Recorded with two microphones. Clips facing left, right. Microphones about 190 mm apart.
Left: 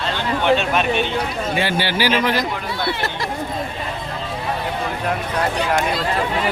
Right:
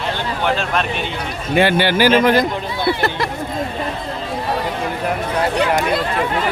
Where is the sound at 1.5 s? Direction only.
55° right (ahead or behind).